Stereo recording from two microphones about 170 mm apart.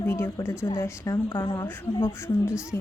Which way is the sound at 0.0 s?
15° left (ahead or behind).